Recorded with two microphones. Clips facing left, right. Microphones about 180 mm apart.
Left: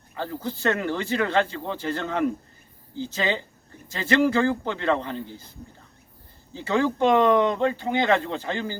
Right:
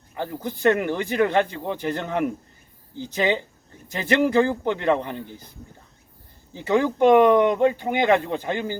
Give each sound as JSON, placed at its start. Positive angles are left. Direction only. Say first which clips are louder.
{"t": 0.2, "sound": "speech", "louder": "right 3 dB", "side_deg": -15}
{"t": 6.5, "sound": "speech", "louder": "right 2 dB", "side_deg": -15}